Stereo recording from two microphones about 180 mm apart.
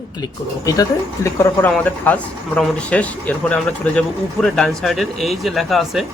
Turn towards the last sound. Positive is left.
turn(degrees=0)  # may be behind; listen again after turning